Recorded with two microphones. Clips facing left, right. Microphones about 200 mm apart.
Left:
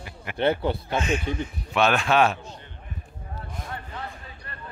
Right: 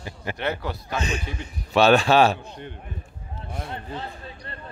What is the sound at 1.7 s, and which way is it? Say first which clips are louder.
Speech: right 5 dB; 35° right (ahead or behind).